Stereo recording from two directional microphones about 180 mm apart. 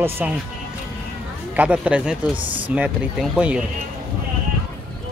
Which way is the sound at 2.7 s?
5° right (ahead or behind).